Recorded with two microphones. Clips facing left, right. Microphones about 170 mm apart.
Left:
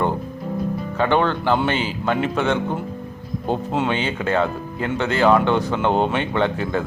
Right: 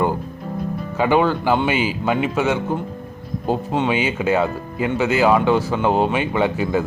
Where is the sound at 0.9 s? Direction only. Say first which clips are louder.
Right 2 dB; 10° right (ahead or behind).